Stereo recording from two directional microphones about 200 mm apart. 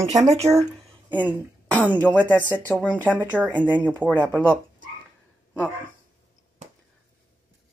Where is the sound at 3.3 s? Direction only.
5° right (ahead or behind).